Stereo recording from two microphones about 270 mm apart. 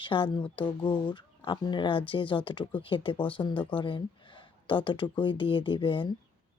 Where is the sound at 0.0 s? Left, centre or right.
Centre.